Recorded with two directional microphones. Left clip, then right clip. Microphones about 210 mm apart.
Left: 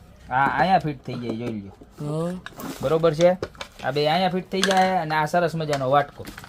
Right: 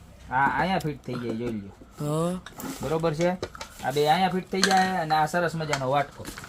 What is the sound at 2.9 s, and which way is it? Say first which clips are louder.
Speech: left 7 dB; 50° left (ahead or behind).